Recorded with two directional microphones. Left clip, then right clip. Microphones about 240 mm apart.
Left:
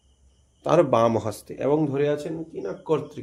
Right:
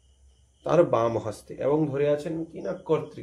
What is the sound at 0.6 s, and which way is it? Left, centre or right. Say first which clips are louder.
Speech: left 3 dB; left.